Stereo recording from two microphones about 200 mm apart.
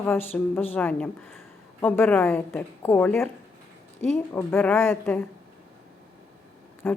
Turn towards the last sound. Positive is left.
turn(degrees=10)  # may be behind; listen again after turning